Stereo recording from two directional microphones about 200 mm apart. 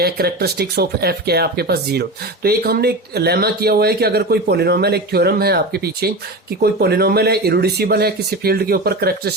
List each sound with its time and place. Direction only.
0.0 s speech: 50° right (ahead or behind)